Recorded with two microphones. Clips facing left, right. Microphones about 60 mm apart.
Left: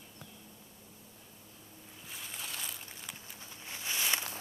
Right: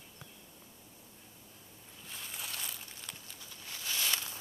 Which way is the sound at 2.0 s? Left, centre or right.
Centre.